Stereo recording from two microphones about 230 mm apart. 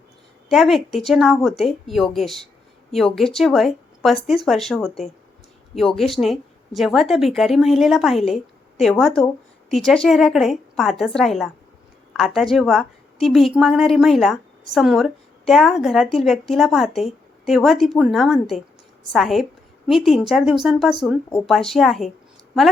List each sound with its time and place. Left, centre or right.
0.5 s a woman's voice: centre